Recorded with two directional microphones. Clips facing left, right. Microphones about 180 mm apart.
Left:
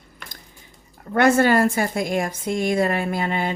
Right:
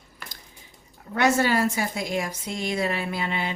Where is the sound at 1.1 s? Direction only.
55° left (ahead or behind).